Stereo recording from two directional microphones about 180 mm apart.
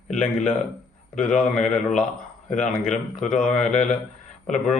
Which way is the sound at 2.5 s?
45° left (ahead or behind).